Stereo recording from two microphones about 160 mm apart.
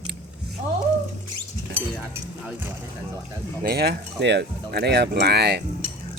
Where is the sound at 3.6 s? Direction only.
75° right (ahead or behind); by 5.6 s 90° right.